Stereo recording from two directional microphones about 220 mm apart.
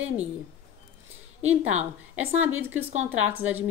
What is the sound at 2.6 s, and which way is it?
A woman's voice, 10° right (ahead or behind).